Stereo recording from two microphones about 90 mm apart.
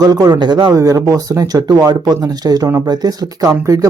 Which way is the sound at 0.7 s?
40° right (ahead or behind).